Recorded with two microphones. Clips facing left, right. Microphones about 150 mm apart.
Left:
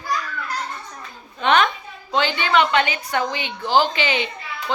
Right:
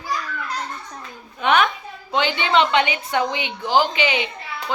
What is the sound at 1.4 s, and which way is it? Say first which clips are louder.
A woman's voice: even; 10° right (ahead or behind).